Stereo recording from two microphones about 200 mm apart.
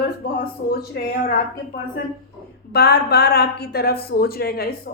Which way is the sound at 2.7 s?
55° left (ahead or behind).